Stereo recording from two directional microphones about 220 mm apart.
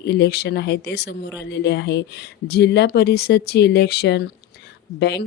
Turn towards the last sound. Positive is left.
turn(degrees=50)  # may be behind; listen again after turning